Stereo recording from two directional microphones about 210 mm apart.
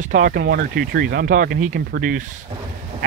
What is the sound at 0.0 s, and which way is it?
Speech, 35° right (ahead or behind).